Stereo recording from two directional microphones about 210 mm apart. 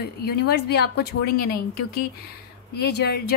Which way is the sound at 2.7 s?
50° left (ahead or behind).